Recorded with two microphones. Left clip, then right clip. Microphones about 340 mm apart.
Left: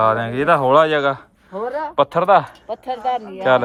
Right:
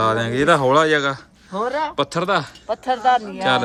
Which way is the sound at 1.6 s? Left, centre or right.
Right.